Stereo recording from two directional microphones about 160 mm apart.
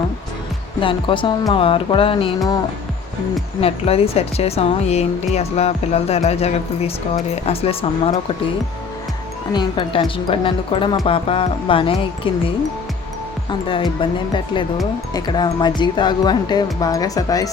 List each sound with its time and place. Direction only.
0.8 s speech: 30° left (ahead or behind)
3.6 s speech: 40° left (ahead or behind)
9.5 s speech: 30° left (ahead or behind)